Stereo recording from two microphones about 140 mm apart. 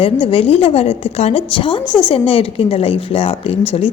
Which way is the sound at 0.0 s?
40° left (ahead or behind).